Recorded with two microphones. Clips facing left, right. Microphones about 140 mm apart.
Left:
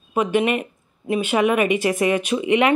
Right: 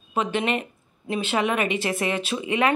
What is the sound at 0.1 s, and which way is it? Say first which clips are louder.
Speech: left 5 dB; 10° left (ahead or behind).